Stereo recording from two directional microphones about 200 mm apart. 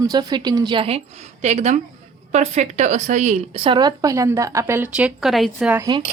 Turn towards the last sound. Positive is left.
turn(degrees=-20)  # may be behind; listen again after turning